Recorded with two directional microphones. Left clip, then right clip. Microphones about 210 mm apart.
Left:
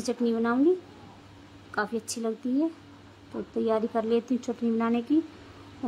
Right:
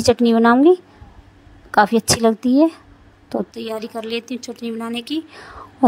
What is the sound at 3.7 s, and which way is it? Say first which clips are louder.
Speech: left 3 dB; centre (ahead or behind).